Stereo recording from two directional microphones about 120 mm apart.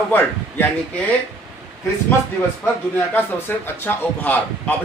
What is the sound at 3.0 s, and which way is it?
Speech, 15° left (ahead or behind).